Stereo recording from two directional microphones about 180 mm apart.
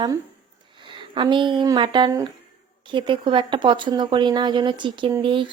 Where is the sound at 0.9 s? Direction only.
25° right (ahead or behind).